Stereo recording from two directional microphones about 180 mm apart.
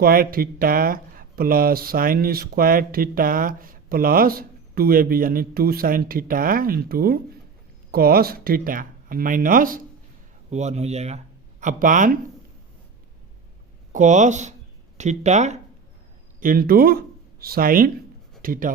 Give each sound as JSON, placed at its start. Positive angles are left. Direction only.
{"t": 0.0, "sound": "speech", "side_deg": -55}
{"t": 10.5, "sound": "a man's voice", "side_deg": -40}
{"t": 13.9, "sound": "a man's voice", "side_deg": -45}
{"t": 16.4, "sound": "speech", "side_deg": -50}